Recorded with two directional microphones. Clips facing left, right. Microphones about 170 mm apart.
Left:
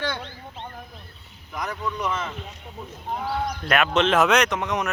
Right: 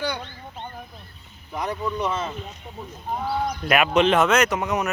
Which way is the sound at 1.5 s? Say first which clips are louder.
Right 3 dB; 30° right (ahead or behind).